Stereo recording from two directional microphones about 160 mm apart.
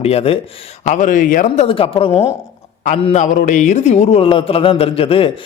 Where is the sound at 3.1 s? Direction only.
50° left (ahead or behind); by 5.3 s 35° left (ahead or behind).